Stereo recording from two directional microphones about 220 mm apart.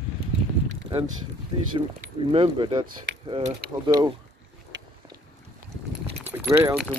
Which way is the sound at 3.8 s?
20° right (ahead or behind).